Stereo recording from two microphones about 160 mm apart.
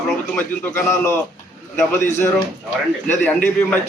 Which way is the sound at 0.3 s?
15° left (ahead or behind).